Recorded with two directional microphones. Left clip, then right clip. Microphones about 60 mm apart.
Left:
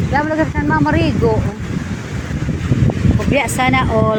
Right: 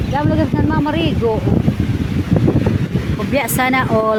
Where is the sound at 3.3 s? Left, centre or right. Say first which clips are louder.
Even; right.